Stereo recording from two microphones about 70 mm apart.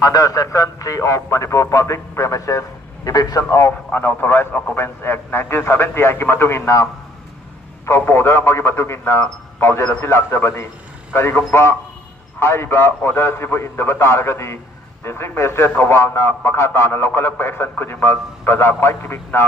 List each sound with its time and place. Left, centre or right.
0.0 s speech: left
4.2 s a man's voice: left
7.8 s a man's voice: left